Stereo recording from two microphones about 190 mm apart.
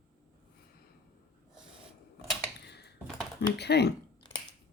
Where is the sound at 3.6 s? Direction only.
60° left (ahead or behind).